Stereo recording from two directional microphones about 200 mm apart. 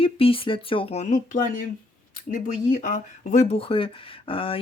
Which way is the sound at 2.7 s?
40° left (ahead or behind).